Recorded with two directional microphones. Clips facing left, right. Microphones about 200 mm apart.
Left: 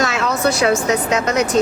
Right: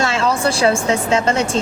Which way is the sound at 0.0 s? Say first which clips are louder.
Even; 30° right (ahead or behind).